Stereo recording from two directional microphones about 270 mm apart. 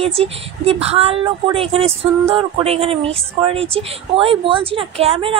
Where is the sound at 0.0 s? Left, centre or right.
Right.